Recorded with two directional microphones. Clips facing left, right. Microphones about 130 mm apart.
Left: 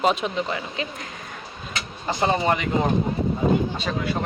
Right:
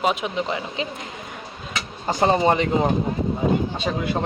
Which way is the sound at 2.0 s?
30° right (ahead or behind).